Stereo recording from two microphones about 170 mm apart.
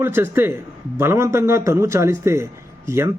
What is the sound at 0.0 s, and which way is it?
Speech, 15° right (ahead or behind).